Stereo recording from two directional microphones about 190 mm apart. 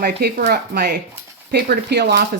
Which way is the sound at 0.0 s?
60° right (ahead or behind).